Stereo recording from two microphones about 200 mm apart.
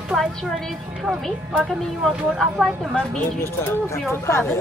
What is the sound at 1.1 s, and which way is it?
Speech, centre (ahead or behind).